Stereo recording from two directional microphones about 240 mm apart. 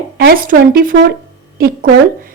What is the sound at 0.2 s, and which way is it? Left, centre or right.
A woman's voice, right.